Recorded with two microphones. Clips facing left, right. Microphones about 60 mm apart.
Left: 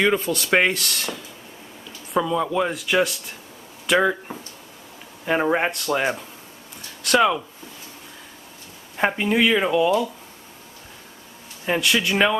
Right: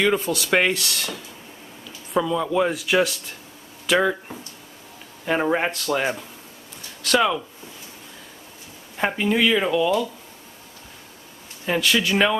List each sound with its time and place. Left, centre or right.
0.2 s speech: left
0.5 s speech: centre
0.7 s speech: centre
8.9 s speech: centre
11.6 s speech: centre